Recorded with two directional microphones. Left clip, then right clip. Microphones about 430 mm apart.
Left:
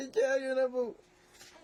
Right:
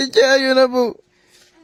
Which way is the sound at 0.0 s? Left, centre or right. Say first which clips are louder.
Right 16 dB; right.